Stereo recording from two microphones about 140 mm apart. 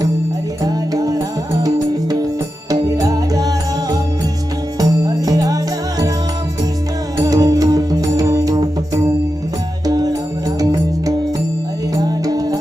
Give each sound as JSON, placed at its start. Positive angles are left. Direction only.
{"t": 0.6, "sound": "music", "side_deg": -25}
{"t": 7.2, "sound": "music", "side_deg": -25}
{"t": 9.8, "sound": "music", "side_deg": -25}